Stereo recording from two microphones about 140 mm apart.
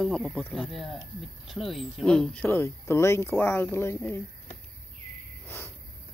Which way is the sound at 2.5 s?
20° left (ahead or behind).